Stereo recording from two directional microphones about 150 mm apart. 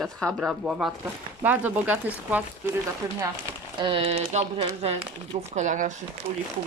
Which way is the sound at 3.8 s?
40° right (ahead or behind).